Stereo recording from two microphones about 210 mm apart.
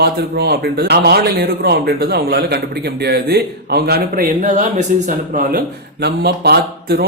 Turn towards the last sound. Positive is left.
turn(degrees=-50)  # may be behind; listen again after turning